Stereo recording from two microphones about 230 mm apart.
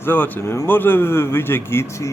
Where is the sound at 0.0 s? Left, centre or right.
Centre.